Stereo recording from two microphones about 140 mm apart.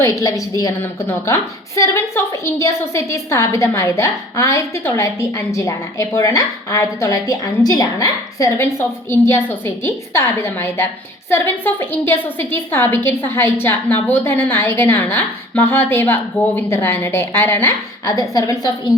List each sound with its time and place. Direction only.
0.0 s a woman's voice: 20° left (ahead or behind)